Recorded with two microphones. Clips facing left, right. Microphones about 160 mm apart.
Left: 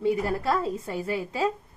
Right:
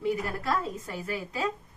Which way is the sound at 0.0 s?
25° left (ahead or behind).